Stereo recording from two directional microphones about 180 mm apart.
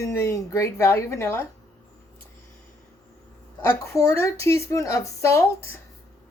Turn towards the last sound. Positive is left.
turn(degrees=15)  # may be behind; listen again after turning